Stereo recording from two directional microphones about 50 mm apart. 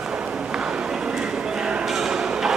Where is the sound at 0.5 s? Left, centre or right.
Centre.